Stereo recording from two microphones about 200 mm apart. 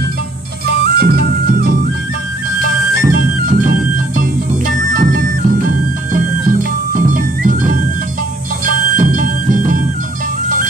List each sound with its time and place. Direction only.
0.9 s music: 50° right (ahead or behind)
3.0 s music: 45° right (ahead or behind)
6.9 s music: 40° right (ahead or behind)
8.9 s music: 40° right (ahead or behind)